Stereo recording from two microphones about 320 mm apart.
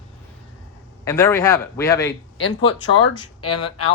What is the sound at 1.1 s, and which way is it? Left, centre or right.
Speech, centre.